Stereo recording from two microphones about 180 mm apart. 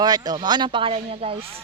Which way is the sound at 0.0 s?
20° right (ahead or behind).